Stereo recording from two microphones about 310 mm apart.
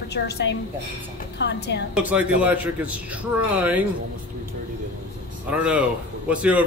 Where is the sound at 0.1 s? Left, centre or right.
Left.